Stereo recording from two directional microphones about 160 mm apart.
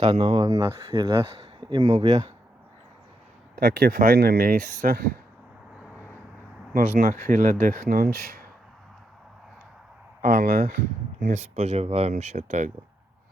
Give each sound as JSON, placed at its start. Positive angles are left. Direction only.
{"t": 0.0, "sound": "speech", "side_deg": -35}
{"t": 1.3, "sound": "speech", "side_deg": -30}
{"t": 3.5, "sound": "speech", "side_deg": -65}
{"t": 6.7, "sound": "speech", "side_deg": -60}
{"t": 10.2, "sound": "speech", "side_deg": -55}